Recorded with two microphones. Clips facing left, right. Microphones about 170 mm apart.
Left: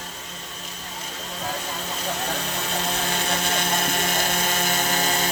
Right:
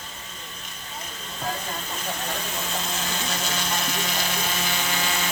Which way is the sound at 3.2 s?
55° left (ahead or behind).